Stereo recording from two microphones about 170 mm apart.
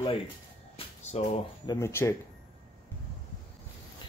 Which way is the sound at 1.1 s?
40° left (ahead or behind).